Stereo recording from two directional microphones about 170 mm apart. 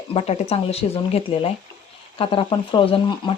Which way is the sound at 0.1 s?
35° left (ahead or behind).